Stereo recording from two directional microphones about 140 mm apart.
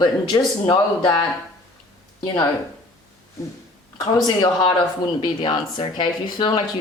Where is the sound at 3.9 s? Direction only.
30° left (ahead or behind).